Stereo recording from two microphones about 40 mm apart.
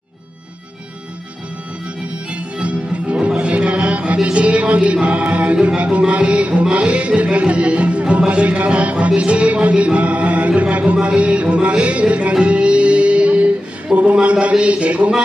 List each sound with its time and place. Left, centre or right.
2.3 s music: right
13.9 s a sound: centre
14.2 s music: right